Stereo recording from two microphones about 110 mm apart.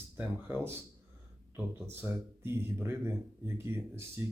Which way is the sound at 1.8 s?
20° right (ahead or behind).